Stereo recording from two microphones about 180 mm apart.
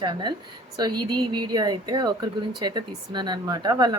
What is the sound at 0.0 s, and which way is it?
Speech, 25° right (ahead or behind).